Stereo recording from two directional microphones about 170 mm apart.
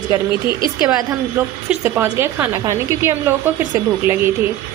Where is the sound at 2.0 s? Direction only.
15° right (ahead or behind).